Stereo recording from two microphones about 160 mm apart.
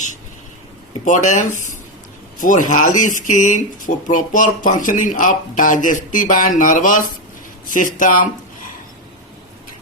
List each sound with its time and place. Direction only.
1.0 s speech: 50° left (ahead or behind)